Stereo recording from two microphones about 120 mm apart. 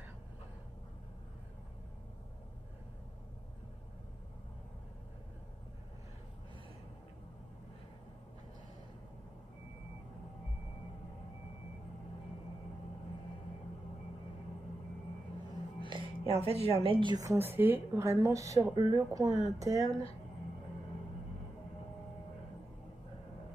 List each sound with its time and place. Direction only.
15.8 s a woman's voice: 45° right (ahead or behind)
17.2 s a woman's voice: 25° right (ahead or behind)